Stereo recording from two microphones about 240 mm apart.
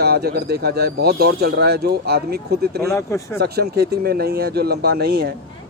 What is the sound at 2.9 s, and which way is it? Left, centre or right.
Speech, centre.